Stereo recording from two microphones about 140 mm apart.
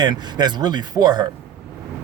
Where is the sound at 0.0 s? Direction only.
30° right (ahead or behind).